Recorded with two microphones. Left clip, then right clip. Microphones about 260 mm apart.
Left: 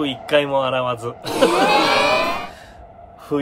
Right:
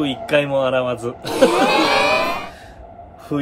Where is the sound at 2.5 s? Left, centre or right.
Centre.